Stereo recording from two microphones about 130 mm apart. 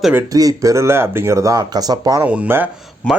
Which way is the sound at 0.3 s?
25° right (ahead or behind).